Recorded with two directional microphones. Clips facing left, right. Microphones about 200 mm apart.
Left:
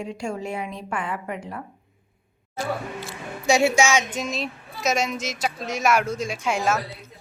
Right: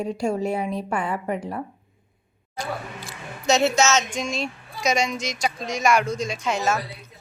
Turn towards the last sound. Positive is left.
turn(degrees=5)  # may be behind; listen again after turning